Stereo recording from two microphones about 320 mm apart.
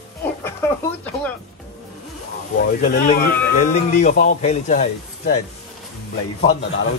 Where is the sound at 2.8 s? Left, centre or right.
Left.